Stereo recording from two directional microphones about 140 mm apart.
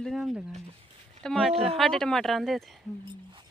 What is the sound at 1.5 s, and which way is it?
Speech, 45° right (ahead or behind).